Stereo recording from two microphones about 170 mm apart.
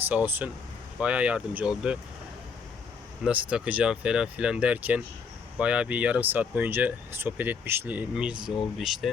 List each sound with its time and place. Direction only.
0.0 s speech: 10° right (ahead or behind)
3.2 s speech: 5° right (ahead or behind)